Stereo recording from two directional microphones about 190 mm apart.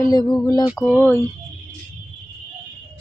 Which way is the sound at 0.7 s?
5° right (ahead or behind).